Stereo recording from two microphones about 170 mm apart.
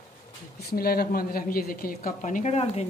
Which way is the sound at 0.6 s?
65° left (ahead or behind).